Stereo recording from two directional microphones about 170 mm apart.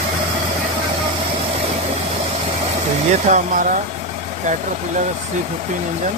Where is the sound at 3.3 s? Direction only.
40° right (ahead or behind).